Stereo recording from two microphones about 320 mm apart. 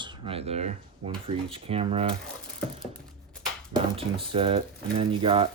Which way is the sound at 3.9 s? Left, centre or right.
Centre.